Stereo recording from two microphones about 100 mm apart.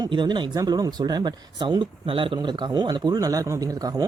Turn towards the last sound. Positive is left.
turn(degrees=-40)  # may be behind; listen again after turning